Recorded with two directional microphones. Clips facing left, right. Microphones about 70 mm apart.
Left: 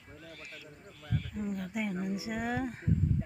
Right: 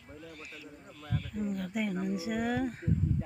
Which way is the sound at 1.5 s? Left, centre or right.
Centre.